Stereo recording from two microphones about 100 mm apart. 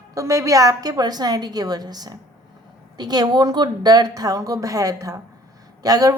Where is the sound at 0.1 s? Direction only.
30° right (ahead or behind).